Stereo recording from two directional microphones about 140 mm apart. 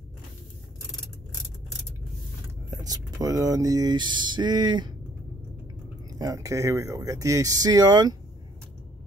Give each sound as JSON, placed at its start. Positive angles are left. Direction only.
{"t": 2.7, "sound": "speech", "side_deg": -25}
{"t": 6.1, "sound": "speech", "side_deg": -25}